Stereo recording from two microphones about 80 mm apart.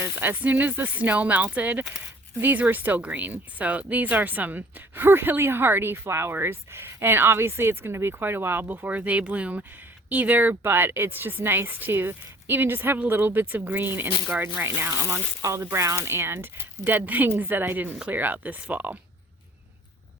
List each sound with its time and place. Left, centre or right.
0.0 s speech: right